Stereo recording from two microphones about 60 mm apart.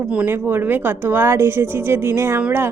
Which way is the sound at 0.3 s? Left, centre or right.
Right.